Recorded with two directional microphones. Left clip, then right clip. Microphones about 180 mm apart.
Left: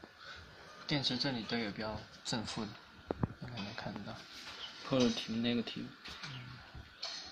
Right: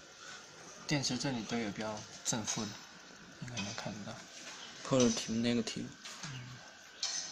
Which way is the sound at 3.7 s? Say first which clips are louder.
Right 1 dB; 5° right (ahead or behind).